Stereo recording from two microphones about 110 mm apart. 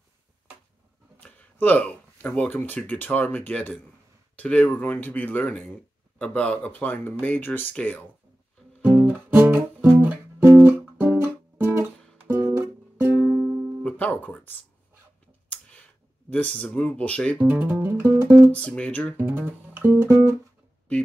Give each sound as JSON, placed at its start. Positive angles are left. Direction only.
{"t": 1.2, "sound": "speech", "side_deg": 15}
{"t": 8.9, "sound": "music", "side_deg": -15}
{"t": 13.3, "sound": "music", "side_deg": -10}
{"t": 13.8, "sound": "speech", "side_deg": 10}
{"t": 16.3, "sound": "speech", "side_deg": 10}
{"t": 17.5, "sound": "music", "side_deg": -15}
{"t": 18.5, "sound": "speech", "side_deg": 10}
{"t": 19.1, "sound": "music", "side_deg": -20}